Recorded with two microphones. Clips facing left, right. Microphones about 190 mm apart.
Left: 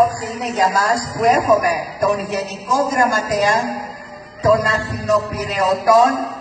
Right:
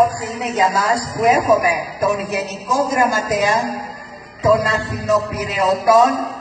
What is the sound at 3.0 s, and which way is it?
Speech, 15° right (ahead or behind).